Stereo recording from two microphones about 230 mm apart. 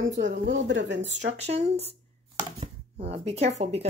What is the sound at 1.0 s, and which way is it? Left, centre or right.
Speech, right.